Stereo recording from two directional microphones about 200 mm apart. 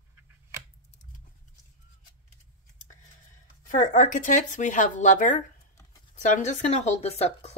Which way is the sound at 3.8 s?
40° left (ahead or behind).